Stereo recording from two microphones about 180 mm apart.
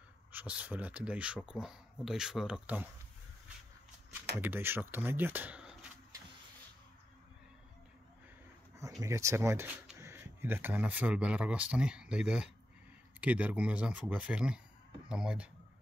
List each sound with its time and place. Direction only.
0.3 s speech: 10° right (ahead or behind)
4.4 s speech: 10° right (ahead or behind)
9.0 s speech: 15° right (ahead or behind)